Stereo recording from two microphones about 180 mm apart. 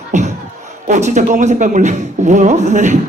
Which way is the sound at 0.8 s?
40° right (ahead or behind).